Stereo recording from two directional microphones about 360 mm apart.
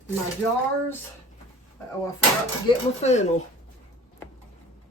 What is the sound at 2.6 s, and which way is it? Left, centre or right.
Speech, centre.